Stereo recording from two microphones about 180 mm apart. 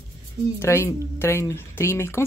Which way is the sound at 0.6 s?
15° left (ahead or behind).